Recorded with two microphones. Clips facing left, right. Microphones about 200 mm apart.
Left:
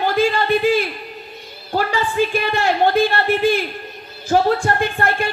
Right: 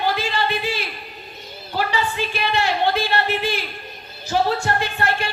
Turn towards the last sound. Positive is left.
turn(degrees=50)  # may be behind; listen again after turning